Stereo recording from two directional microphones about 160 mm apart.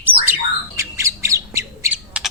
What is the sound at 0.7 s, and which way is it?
Squawk, 15° right (ahead or behind).